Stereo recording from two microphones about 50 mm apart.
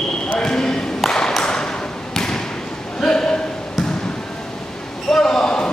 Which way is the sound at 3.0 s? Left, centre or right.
Centre.